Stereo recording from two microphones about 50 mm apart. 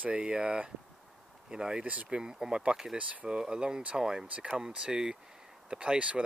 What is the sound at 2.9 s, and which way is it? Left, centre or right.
Speech, right.